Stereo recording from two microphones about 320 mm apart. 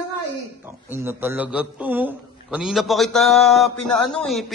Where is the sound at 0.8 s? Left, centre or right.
Centre.